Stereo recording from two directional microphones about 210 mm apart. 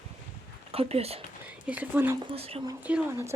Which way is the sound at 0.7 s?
30° right (ahead or behind).